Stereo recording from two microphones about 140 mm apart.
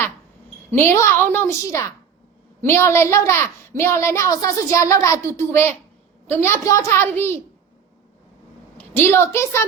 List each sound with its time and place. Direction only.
0.8 s a woman's voice: 15° left (ahead or behind)
8.8 s a woman's voice: 15° left (ahead or behind)